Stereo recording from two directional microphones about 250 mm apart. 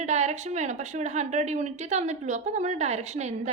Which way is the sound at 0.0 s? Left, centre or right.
Right.